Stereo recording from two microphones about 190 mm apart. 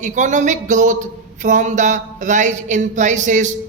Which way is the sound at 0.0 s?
40° right (ahead or behind).